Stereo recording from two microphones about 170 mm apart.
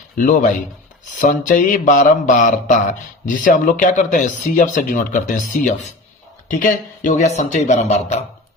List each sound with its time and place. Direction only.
0.2 s speech: 50° left (ahead or behind)